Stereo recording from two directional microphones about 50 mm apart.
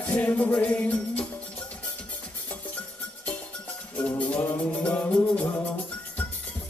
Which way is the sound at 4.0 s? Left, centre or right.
Left.